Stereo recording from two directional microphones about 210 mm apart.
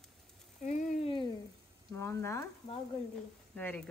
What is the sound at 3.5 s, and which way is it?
Speech, 5° left (ahead or behind).